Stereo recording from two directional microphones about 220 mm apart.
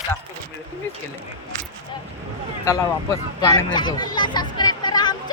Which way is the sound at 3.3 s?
15° left (ahead or behind).